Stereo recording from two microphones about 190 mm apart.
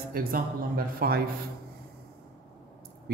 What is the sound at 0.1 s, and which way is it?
Speech, 50° right (ahead or behind).